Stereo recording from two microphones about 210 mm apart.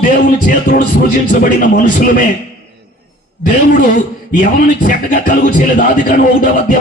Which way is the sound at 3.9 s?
35° left (ahead or behind).